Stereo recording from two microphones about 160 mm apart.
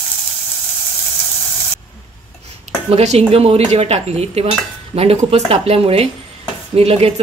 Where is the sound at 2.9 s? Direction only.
45° right (ahead or behind).